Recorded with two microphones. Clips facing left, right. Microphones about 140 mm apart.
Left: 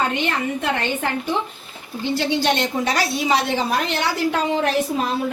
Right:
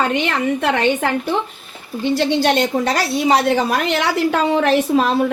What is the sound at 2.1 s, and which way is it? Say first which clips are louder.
A woman's voice: right 4 dB; 55° right (ahead or behind).